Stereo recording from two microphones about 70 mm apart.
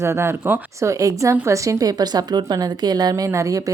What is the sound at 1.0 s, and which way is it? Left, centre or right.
A woman's voice, right.